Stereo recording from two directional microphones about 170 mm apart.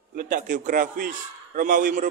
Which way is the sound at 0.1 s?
55° right (ahead or behind).